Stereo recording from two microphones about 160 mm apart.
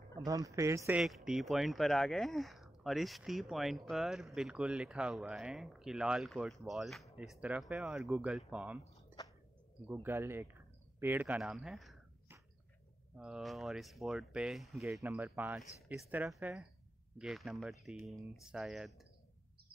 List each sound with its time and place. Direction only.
0.2 s speech: 20° right (ahead or behind)
1.0 s speech: centre (ahead or behind)
9.1 s a sound: 15° right (ahead or behind)
9.8 s speech: 15° right (ahead or behind)
13.2 s a woman's voice: 5° right (ahead or behind)